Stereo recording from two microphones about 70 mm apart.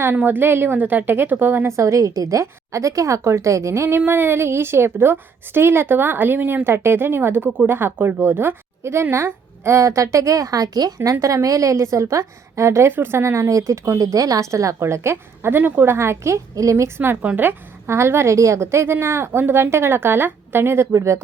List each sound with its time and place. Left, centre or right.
0.0 s a woman's voice: right
17.2 s a woman's voice: right
17.8 s a woman's voice: right